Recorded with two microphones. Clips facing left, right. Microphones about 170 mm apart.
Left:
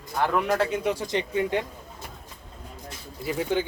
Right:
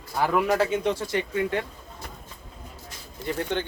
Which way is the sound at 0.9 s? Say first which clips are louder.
Even; 15° left (ahead or behind).